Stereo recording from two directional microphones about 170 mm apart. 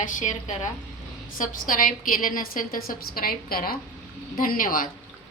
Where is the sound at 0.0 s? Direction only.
50° left (ahead or behind).